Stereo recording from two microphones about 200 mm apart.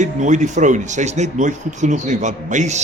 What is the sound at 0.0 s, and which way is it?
Speech, 35° right (ahead or behind).